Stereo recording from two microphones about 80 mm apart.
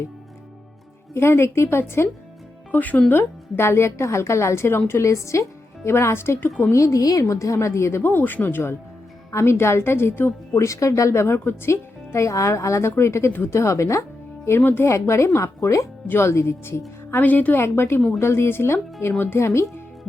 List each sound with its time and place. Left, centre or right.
1.1 s speech: left
2.7 s a woman's voice: centre
6.7 s speech: left
10.6 s speech: left
17.1 s a woman's voice: left